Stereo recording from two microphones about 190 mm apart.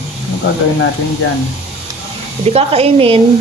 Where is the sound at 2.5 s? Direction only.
30° right (ahead or behind).